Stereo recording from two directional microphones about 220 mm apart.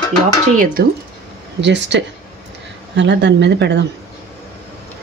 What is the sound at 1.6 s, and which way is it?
Speech, 55° right (ahead or behind).